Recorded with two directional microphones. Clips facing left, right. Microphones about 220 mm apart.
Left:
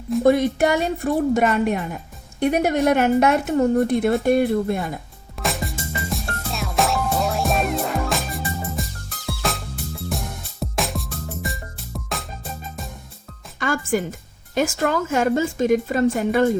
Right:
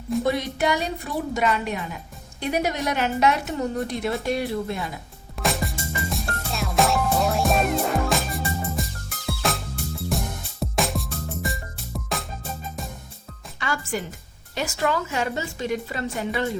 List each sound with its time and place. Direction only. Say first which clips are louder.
0.2 s speech: left 9 dB; 50° left (ahead or behind)
5.4 s music: even; centre (ahead or behind)
13.6 s speech: left 7 dB; 50° left (ahead or behind)